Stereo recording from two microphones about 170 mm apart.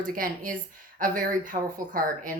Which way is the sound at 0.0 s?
55° right (ahead or behind).